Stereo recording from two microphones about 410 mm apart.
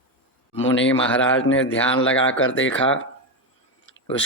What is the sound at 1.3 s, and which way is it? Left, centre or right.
Speech, left.